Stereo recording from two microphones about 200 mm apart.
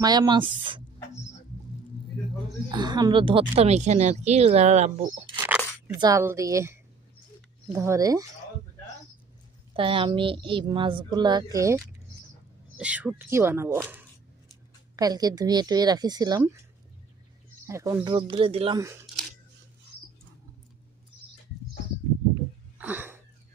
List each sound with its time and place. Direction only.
0.0 s speech: 20° right (ahead or behind)
2.7 s a woman's voice: 20° right (ahead or behind)
5.9 s speech: 15° right (ahead or behind)
9.8 s speech: 25° right (ahead or behind)
15.0 s speech: 20° right (ahead or behind)
17.6 s speech: 15° right (ahead or behind)
22.8 s a sound: 10° right (ahead or behind)